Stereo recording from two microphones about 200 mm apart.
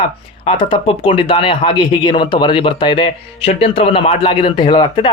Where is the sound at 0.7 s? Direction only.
25° left (ahead or behind).